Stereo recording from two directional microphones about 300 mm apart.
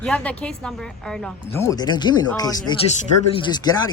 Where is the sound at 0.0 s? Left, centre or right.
Centre.